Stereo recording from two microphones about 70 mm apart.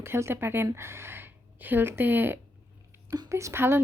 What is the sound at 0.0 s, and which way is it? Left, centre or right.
A woman's voice, right.